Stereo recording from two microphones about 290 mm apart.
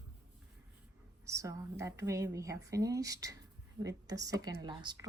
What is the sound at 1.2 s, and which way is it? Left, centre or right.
A woman's voice, centre.